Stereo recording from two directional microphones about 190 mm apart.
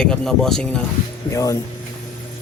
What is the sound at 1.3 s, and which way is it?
Speech, 15° left (ahead or behind).